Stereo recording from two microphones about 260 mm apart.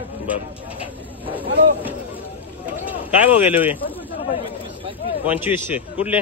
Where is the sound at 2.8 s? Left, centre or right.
Centre.